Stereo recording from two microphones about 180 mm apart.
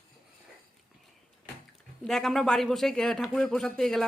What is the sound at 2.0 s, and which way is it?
Speech, centre (ahead or behind).